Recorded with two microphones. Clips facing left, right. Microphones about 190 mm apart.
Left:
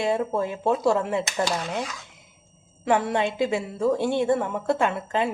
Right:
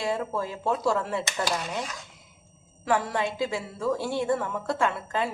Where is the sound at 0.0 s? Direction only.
25° left (ahead or behind).